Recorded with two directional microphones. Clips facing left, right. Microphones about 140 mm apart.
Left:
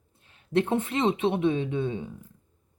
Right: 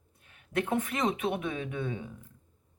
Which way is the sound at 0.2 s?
30° left (ahead or behind).